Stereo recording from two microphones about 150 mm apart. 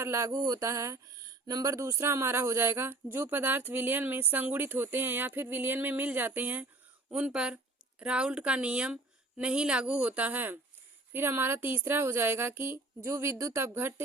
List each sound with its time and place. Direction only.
0.0 s a woman's voice: 20° right (ahead or behind)